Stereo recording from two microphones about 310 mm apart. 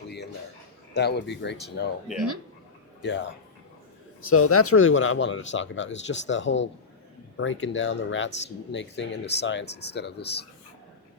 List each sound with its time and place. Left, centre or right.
0.9 s speech: left
3.0 s speech: left